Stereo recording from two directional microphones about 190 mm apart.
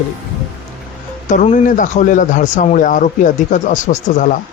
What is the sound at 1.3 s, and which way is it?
Speech, 40° left (ahead or behind).